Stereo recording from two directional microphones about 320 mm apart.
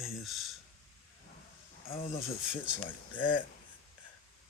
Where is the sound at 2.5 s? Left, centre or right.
Centre.